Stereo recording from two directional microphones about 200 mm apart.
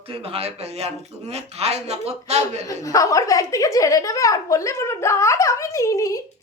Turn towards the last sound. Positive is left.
turn(degrees=15)  # may be behind; listen again after turning